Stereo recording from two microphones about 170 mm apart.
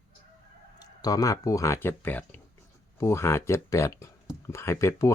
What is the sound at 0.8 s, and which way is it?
Speech, 20° left (ahead or behind).